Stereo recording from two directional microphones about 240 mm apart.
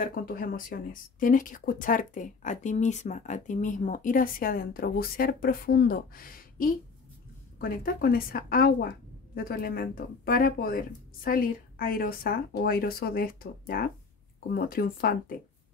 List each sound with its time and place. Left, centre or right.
0.0 s speech: left